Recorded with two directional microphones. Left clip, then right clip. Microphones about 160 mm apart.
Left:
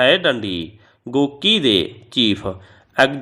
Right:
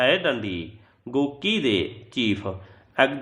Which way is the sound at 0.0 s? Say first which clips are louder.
Left 6 dB; 35° left (ahead or behind).